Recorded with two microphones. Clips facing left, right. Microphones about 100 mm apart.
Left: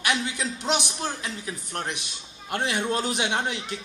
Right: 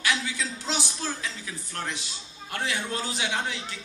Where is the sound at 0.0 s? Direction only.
20° left (ahead or behind).